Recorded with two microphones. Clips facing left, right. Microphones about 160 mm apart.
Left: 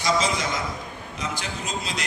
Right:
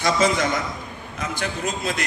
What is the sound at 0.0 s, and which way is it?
A man's voice, 55° right (ahead or behind).